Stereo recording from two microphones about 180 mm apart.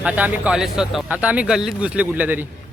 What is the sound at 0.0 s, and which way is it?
Speech, 5° right (ahead or behind).